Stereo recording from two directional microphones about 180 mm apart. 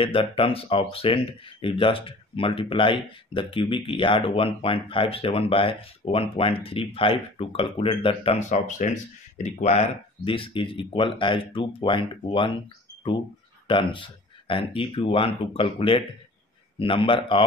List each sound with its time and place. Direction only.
0.0 s speech: 30° left (ahead or behind)
13.7 s speech: 30° left (ahead or behind)